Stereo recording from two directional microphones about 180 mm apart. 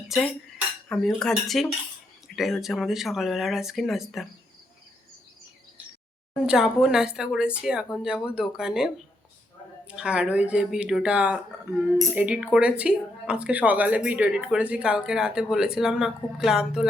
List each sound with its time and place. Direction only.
0.9 s speech: 5° left (ahead or behind)
6.4 s speech: 5° right (ahead or behind)
9.9 s speech: 5° right (ahead or behind)